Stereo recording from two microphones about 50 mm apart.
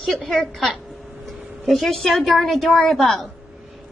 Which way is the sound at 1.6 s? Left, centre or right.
Centre.